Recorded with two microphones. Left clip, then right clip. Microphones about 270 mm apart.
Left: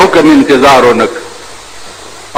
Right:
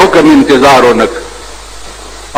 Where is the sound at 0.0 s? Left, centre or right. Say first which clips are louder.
Even; right.